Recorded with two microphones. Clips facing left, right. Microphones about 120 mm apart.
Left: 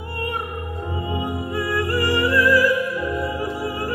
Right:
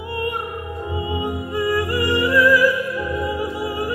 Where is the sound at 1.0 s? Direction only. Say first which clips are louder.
Even; 15° right (ahead or behind).